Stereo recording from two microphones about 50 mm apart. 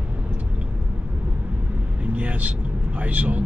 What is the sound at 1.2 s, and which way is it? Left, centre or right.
Speech, right.